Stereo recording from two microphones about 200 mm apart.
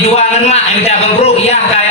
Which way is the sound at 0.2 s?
30° left (ahead or behind).